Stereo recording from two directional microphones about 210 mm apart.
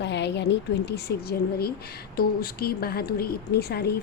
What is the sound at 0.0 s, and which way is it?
A woman's voice, 55° left (ahead or behind).